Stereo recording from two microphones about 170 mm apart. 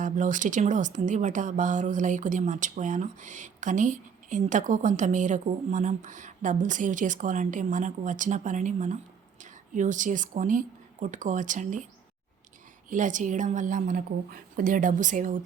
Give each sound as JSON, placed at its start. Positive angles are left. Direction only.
{"t": 0.0, "sound": "a woman's voice", "side_deg": -50}
{"t": 12.9, "sound": "speech", "side_deg": -50}